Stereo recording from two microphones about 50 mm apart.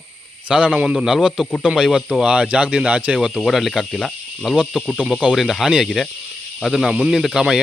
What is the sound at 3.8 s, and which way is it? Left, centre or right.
Speech, centre.